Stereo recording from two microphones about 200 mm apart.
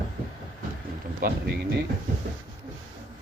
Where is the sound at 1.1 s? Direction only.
50° right (ahead or behind).